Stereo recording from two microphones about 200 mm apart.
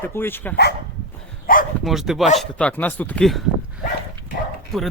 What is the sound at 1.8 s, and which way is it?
Speech, centre (ahead or behind).